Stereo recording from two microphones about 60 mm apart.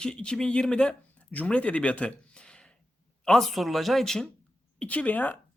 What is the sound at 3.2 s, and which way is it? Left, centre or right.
Speech, centre.